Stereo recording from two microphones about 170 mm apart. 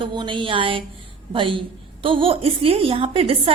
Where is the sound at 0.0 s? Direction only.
30° right (ahead or behind).